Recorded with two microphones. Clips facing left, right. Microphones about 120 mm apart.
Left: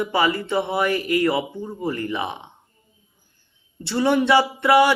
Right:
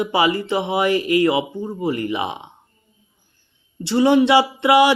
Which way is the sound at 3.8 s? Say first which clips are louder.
Right 4 dB; 15° right (ahead or behind).